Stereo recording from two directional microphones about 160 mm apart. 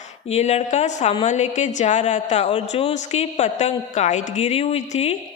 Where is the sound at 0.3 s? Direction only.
45° left (ahead or behind).